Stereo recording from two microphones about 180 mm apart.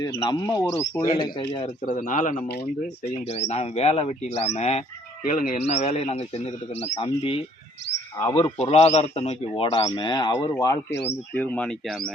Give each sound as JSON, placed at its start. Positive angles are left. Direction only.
{"t": 0.2, "sound": "speech", "side_deg": 25}
{"t": 1.1, "sound": "speech", "side_deg": 25}
{"t": 1.6, "sound": "speech", "side_deg": 40}
{"t": 5.2, "sound": "speech", "side_deg": 50}
{"t": 8.2, "sound": "speech", "side_deg": 10}
{"t": 8.7, "sound": "speech", "side_deg": 35}
{"t": 11.3, "sound": "speech", "side_deg": 10}